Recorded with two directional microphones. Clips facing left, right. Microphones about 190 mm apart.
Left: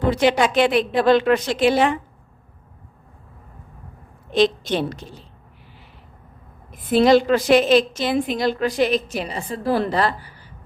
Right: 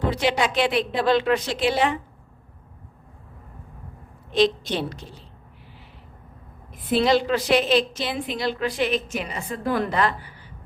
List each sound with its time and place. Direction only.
0.0 s a woman's voice: 50° left (ahead or behind)
4.3 s a woman's voice: 50° left (ahead or behind)
6.9 s a woman's voice: 50° left (ahead or behind)